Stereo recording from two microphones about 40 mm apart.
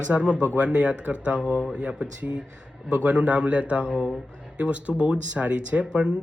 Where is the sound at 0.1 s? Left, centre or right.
Right.